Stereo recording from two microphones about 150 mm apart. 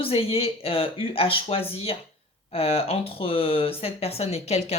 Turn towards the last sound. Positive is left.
turn(degrees=45)  # may be behind; listen again after turning